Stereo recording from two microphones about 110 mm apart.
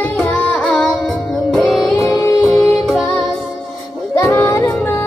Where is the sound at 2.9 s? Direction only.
Centre (ahead or behind).